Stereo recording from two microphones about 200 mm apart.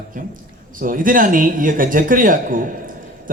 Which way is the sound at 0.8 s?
45° right (ahead or behind).